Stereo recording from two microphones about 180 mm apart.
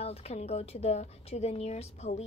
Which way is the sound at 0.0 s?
35° left (ahead or behind).